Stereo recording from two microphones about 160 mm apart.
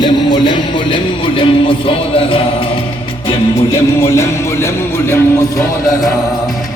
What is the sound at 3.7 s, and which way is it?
Music, 15° left (ahead or behind).